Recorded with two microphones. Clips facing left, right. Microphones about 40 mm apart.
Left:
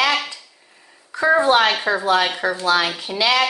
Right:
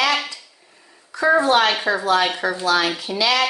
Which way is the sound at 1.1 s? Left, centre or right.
Left.